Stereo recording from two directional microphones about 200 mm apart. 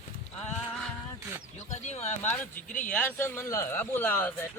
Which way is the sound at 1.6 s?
35° left (ahead or behind).